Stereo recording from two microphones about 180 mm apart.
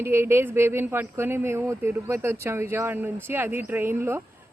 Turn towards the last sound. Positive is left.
turn(degrees=-10)  # may be behind; listen again after turning